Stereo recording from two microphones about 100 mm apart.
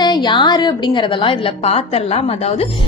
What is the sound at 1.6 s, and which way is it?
Speech, 90° left.